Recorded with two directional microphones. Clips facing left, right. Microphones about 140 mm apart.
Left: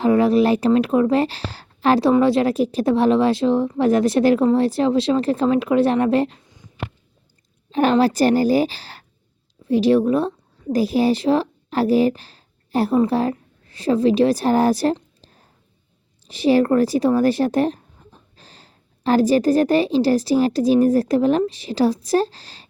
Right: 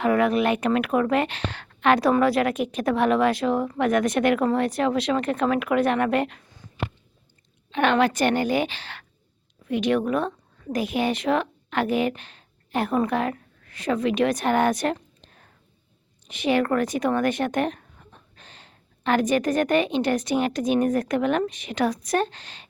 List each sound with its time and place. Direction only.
0.0 s a woman's voice: 30° left (ahead or behind)
7.7 s a woman's voice: 35° left (ahead or behind)